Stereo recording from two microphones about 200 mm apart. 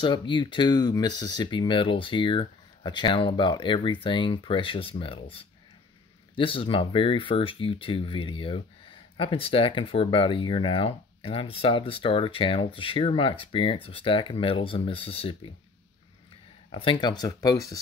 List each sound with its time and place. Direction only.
0.0 s speech: 25° left (ahead or behind)
16.7 s speech: 25° left (ahead or behind)